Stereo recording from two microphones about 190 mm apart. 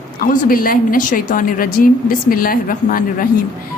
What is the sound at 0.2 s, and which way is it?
A woman's voice, 50° left (ahead or behind).